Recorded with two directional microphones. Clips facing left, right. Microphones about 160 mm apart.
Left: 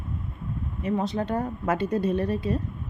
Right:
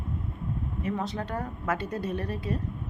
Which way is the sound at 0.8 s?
20° left (ahead or behind).